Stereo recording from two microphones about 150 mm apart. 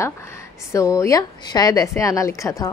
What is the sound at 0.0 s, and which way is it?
Speech, 20° left (ahead or behind).